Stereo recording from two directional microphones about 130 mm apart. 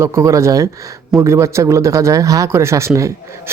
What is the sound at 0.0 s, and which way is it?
Speech, 20° right (ahead or behind).